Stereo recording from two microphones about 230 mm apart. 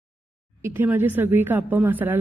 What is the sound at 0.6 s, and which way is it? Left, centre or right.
A woman's voice, centre.